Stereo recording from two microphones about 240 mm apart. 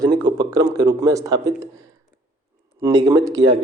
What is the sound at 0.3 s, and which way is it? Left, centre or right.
Speech, centre.